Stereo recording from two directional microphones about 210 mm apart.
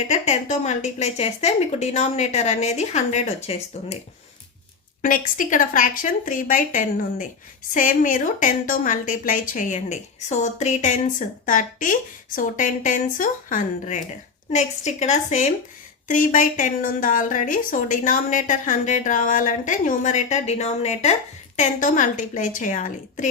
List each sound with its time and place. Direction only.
0.1 s a woman's voice: 35° left (ahead or behind)
5.0 s a woman's voice: 40° left (ahead or behind)